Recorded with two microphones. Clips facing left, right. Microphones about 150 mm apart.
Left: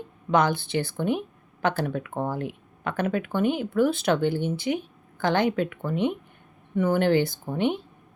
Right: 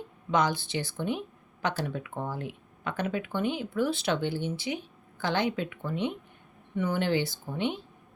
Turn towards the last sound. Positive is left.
turn(degrees=55)  # may be behind; listen again after turning